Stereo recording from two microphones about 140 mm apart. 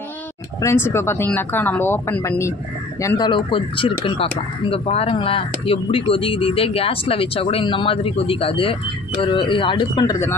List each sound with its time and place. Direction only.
0.6 s speech: 15° left (ahead or behind)
3.3 s speech: 35° left (ahead or behind)